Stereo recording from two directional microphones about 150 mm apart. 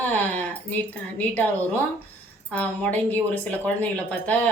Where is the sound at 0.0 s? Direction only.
10° left (ahead or behind).